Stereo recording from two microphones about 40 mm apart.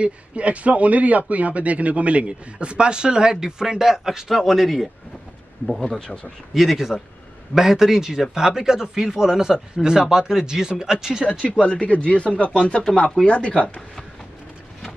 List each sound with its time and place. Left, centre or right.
0.0 s a man's voice: right; by 4.8 s centre
5.7 s a man's voice: centre
6.5 s speech: centre
11.6 s speech: left